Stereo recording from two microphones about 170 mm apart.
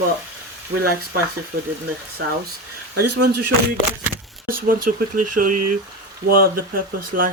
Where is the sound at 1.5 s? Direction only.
60° right (ahead or behind).